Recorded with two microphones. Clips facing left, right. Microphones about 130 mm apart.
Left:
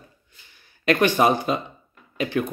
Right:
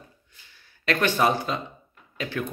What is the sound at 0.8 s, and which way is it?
Speech, 15° left (ahead or behind).